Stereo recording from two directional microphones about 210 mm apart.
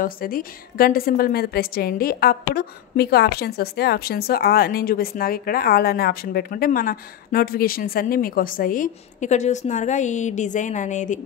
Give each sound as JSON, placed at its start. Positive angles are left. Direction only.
{"t": 0.0, "sound": "a woman's voice", "side_deg": 40}